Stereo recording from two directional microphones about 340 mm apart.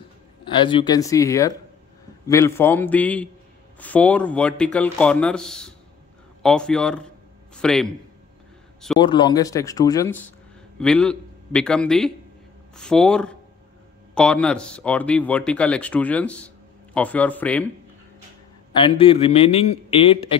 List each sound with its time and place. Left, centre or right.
0.5 s a man's voice: centre
9.0 s a man's voice: centre
18.7 s a man's voice: centre